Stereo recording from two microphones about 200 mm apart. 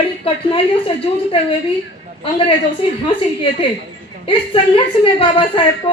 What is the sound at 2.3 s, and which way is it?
Speech, 25° left (ahead or behind).